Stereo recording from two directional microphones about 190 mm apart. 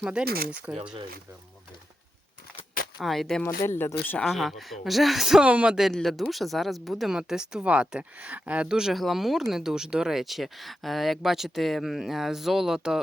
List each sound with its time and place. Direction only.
0.0 s speech: 5° right (ahead or behind)
0.3 s speech: 50° right (ahead or behind)
3.0 s speech: centre (ahead or behind)
3.6 s speech: 15° left (ahead or behind); by 13.0 s 5° right (ahead or behind)